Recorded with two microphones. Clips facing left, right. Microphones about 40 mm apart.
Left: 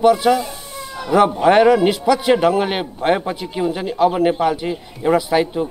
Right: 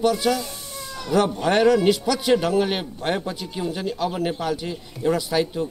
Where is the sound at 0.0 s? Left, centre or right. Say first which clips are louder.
Left 7 dB; left.